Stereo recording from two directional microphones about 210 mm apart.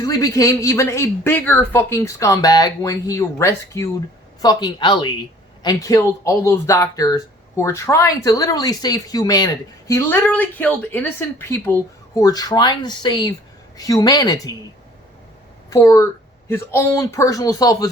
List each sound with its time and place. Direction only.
0.0 s speech: 15° left (ahead or behind)
15.7 s speech: 15° left (ahead or behind)